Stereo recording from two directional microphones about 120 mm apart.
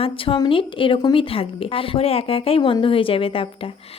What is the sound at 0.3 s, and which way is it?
A woman's voice, 45° left (ahead or behind).